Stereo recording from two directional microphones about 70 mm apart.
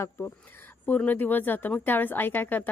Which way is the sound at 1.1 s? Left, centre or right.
Left.